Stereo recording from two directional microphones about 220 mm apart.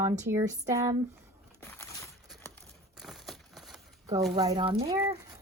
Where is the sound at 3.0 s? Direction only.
Centre (ahead or behind).